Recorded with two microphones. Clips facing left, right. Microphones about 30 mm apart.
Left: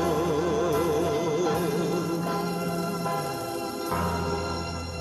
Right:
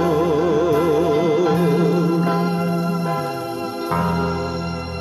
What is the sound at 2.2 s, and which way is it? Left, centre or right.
Organ, right.